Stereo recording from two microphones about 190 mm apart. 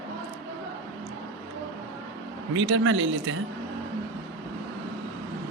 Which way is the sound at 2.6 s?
90° right.